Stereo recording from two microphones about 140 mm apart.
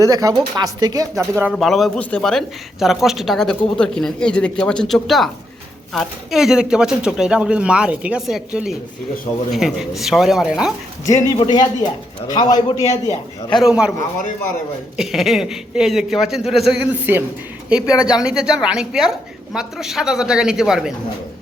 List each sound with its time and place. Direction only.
0.0 s speech: 25° right (ahead or behind)
1.2 s speech: 20° right (ahead or behind)
1.5 s a woman's voice: centre (ahead or behind)
11.3 s a man's voice: 30° left (ahead or behind)
13.6 s a woman's voice: 5° right (ahead or behind)
14.9 s a woman's voice: centre (ahead or behind)
16.9 s a woman's voice: 15° right (ahead or behind)